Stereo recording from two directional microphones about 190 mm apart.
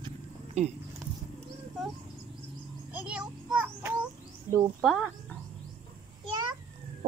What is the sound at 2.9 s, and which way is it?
Speech, 5° right (ahead or behind).